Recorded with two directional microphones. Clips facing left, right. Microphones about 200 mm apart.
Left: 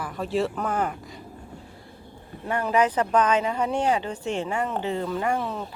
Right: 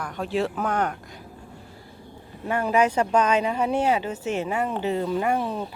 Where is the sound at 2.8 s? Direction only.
10° right (ahead or behind).